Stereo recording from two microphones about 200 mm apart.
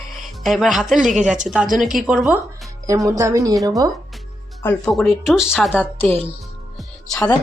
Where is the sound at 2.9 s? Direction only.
15° right (ahead or behind).